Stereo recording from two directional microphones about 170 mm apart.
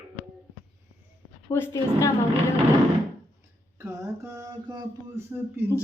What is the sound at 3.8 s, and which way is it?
Speech, 15° right (ahead or behind).